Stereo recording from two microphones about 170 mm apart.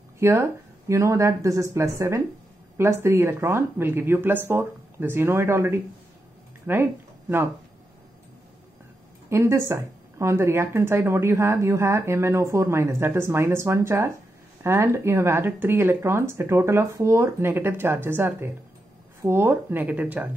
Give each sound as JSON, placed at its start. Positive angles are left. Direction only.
{"t": 0.2, "sound": "speech", "side_deg": -15}
{"t": 9.3, "sound": "speech", "side_deg": -15}